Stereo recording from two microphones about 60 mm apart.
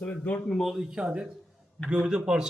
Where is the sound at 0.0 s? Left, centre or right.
Left.